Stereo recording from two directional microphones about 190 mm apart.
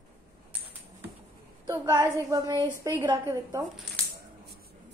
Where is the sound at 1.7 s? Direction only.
15° right (ahead or behind).